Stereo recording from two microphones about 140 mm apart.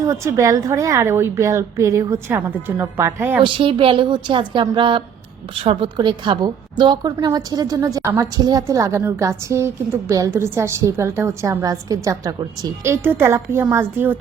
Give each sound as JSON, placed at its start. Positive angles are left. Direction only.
{"t": 0.0, "sound": "a woman's voice", "side_deg": -20}
{"t": 3.4, "sound": "a woman's voice", "side_deg": -40}